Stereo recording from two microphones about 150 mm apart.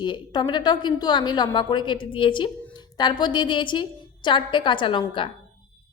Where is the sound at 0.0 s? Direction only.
30° left (ahead or behind).